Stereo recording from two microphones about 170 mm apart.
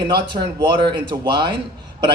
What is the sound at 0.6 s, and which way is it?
Speech, 25° right (ahead or behind).